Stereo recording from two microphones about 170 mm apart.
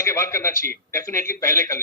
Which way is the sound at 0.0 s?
15° left (ahead or behind).